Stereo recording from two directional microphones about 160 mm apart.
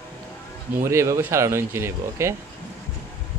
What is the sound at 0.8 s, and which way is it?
Speech, 20° right (ahead or behind).